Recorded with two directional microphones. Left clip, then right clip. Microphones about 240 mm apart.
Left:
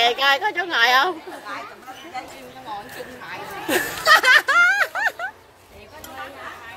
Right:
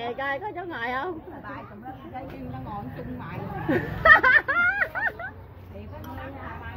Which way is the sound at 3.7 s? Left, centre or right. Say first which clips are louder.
Left 1 dB; left.